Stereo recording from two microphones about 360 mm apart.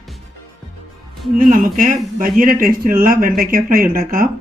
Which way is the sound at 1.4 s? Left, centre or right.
Right.